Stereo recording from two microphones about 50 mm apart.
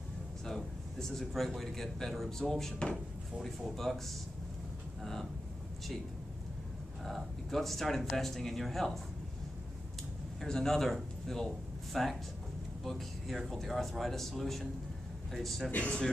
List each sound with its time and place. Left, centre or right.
0.5 s speech: centre
3.7 s a man's voice: centre
7.1 s a man's voice: centre
10.4 s a man's voice: centre
15.7 s speech: left